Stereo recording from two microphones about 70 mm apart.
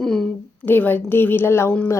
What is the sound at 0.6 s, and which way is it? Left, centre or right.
Speech, left.